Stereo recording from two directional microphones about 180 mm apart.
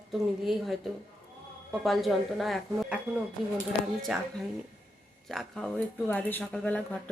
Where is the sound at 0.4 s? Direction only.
Centre (ahead or behind).